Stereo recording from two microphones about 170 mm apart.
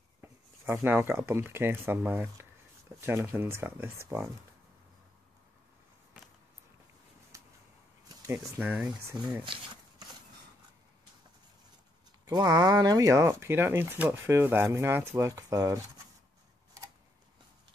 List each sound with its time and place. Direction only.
0.2 s speech: 10° right (ahead or behind)
8.5 s speech: 10° right (ahead or behind)
9.4 s speech: 25° right (ahead or behind)
12.3 s speech: 25° right (ahead or behind)